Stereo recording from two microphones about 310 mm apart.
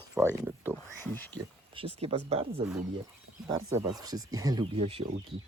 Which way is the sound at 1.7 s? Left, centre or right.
Centre.